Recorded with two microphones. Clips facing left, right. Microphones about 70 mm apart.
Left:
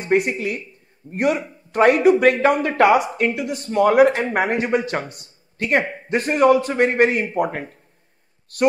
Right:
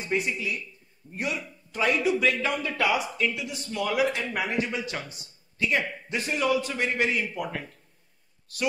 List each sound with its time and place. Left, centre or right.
0.0 s speech: left